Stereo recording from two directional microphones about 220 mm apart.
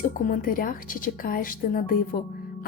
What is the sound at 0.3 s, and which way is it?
A woman's voice, 40° left (ahead or behind).